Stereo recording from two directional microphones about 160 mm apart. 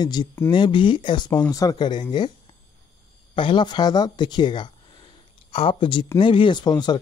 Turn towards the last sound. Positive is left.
turn(degrees=25)  # may be behind; listen again after turning